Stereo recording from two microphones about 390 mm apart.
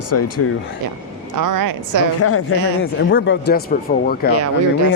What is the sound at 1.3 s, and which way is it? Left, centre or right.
Speech, right.